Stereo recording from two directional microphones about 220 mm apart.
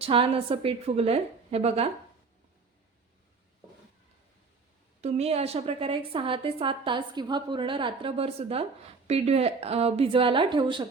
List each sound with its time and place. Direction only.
0.0 s a woman's voice: 25° right (ahead or behind)
4.9 s a woman's voice: 30° right (ahead or behind)